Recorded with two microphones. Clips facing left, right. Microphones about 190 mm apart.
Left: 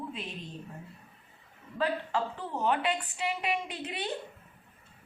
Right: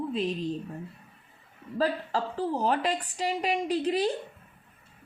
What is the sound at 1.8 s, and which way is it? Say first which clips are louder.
Speech: right 2 dB; 35° right (ahead or behind).